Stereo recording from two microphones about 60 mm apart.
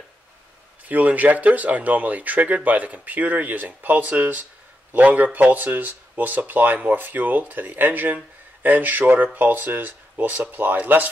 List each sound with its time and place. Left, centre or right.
0.8 s speech: right